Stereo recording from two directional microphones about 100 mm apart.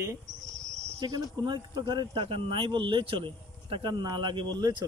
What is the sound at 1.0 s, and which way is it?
Speech, 40° right (ahead or behind).